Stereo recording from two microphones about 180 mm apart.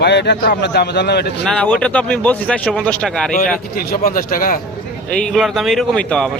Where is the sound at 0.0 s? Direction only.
70° left (ahead or behind).